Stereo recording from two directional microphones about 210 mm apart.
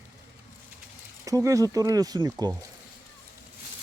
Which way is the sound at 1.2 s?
15° right (ahead or behind).